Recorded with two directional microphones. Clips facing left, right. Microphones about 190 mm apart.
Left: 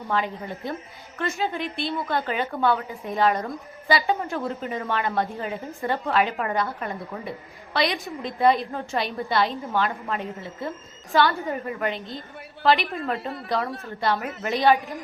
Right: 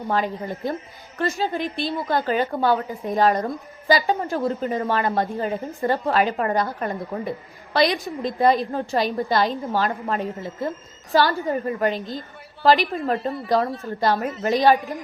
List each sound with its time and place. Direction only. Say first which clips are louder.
0.1 s a woman's voice: right 3 dB; 40° right (ahead or behind)